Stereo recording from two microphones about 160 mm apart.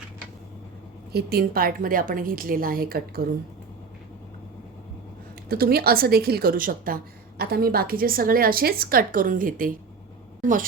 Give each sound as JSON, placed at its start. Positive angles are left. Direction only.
{"t": 1.1, "sound": "a woman's voice", "side_deg": -75}
{"t": 5.5, "sound": "a woman's voice", "side_deg": -70}